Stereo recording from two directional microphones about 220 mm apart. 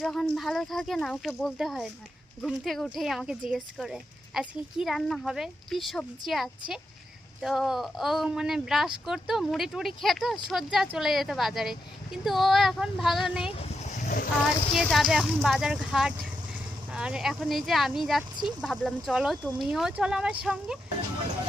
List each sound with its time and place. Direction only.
0.0 s speech: centre (ahead or behind)
13.6 s a sound: 30° left (ahead or behind)
14.7 s speech: centre (ahead or behind)